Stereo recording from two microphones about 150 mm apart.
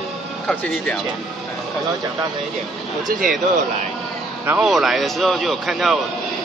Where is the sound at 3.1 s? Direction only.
65° right (ahead or behind).